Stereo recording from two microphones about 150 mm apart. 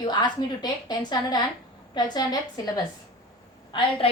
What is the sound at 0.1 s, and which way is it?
A woman's voice, 30° left (ahead or behind).